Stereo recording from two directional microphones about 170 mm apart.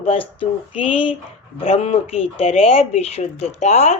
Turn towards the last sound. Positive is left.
turn(degrees=40)  # may be behind; listen again after turning